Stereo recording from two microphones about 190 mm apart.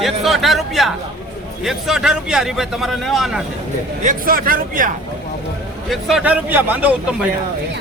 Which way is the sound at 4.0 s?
45° right (ahead or behind).